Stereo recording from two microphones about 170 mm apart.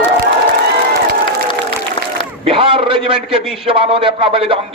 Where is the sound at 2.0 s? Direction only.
30° left (ahead or behind).